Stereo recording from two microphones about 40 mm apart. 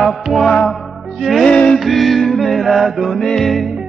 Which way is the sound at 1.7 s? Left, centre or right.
Centre.